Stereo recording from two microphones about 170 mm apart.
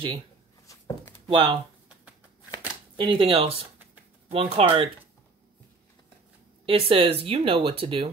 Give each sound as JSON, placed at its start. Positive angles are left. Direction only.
{"t": 0.7, "sound": "a sound", "side_deg": 15}
{"t": 1.2, "sound": "speech", "side_deg": -30}
{"t": 3.0, "sound": "speech", "side_deg": -30}
{"t": 6.6, "sound": "speech", "side_deg": -30}